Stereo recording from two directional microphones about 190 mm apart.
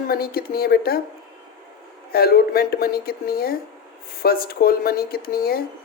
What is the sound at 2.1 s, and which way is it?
Speech, 55° left (ahead or behind).